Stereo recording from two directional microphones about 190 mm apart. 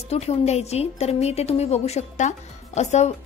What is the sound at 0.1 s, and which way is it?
A woman's voice, 35° left (ahead or behind).